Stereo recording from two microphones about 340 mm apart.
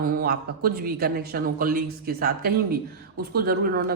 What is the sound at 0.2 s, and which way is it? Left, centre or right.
Speech, right.